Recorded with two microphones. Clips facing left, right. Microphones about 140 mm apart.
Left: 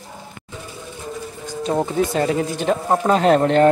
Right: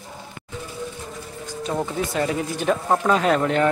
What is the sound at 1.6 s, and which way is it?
Speech, 25° left (ahead or behind).